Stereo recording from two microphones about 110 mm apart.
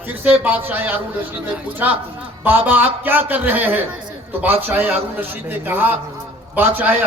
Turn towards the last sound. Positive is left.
turn(degrees=-15)  # may be behind; listen again after turning